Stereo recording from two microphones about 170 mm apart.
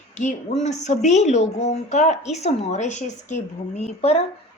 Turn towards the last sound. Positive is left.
turn(degrees=40)  # may be behind; listen again after turning